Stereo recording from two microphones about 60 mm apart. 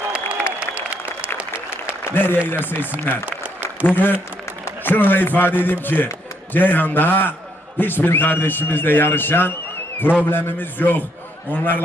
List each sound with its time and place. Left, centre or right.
0.1 s applause: right
1.7 s applause: left
2.5 s a man's voice: left
3.2 s applause: right
3.8 s a man's voice: left